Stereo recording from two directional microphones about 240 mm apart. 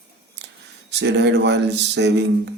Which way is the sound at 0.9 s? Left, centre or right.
Right.